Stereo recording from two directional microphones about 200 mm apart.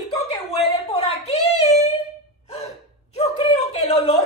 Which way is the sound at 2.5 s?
30° left (ahead or behind).